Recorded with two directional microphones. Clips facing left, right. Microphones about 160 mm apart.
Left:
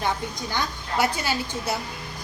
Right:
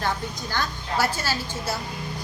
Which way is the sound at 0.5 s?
20° left (ahead or behind).